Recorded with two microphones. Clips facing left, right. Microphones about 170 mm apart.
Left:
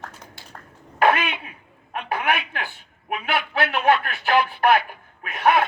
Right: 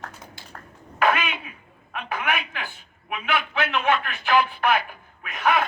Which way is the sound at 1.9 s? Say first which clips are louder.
Left 3 dB; 40° left (ahead or behind).